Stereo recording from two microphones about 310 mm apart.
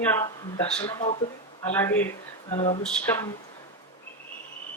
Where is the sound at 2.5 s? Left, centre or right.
Centre.